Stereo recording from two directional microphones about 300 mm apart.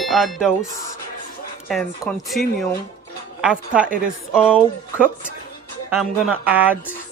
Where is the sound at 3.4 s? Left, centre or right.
Centre.